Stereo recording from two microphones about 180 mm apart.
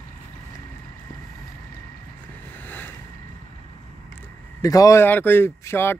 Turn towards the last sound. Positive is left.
turn(degrees=15)  # may be behind; listen again after turning